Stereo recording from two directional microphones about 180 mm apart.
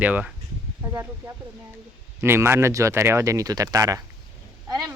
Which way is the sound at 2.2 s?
15° right (ahead or behind).